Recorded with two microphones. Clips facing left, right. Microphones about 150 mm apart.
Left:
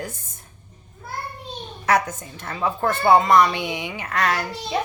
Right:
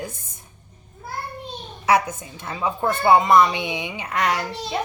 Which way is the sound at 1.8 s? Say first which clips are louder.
Right 1 dB; 10° right (ahead or behind).